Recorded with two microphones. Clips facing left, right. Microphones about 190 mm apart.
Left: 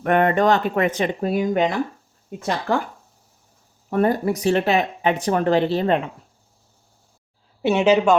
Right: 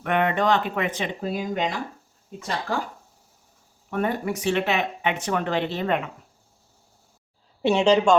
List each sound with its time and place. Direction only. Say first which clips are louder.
0.0 s speech: left 5 dB; 45° left (ahead or behind); by 1.6 s 60° left (ahead or behind)
3.8 s speech: left 6 dB; 35° left (ahead or behind)
7.6 s a woman's voice: left 2 dB; 5° left (ahead or behind)